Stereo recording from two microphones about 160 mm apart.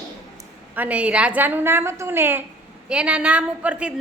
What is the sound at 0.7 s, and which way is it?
A woman's voice, 10° right (ahead or behind).